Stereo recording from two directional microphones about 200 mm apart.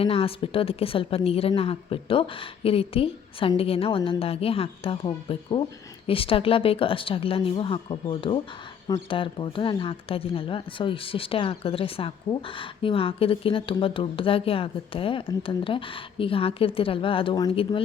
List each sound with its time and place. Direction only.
0.0 s speech: 30° left (ahead or behind)